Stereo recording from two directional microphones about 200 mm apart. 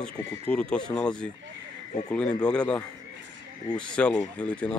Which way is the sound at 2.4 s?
5° left (ahead or behind).